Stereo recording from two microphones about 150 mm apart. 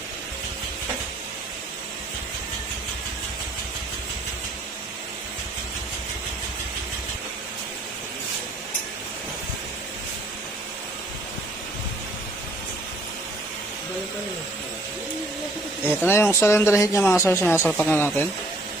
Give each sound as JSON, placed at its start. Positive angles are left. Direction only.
{"t": 16.0, "sound": "speech", "side_deg": 15}